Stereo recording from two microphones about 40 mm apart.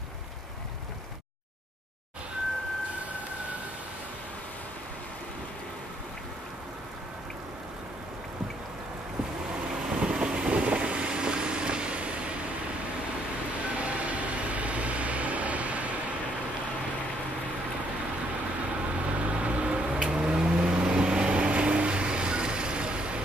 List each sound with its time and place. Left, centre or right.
9.8 s vehicle: right
13.8 s vehicle: right
19.2 s vehicle: right